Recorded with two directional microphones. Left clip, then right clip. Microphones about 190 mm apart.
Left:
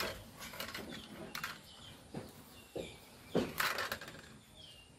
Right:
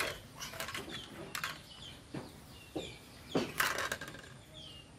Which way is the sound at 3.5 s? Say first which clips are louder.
Right 5 dB; 20° right (ahead or behind).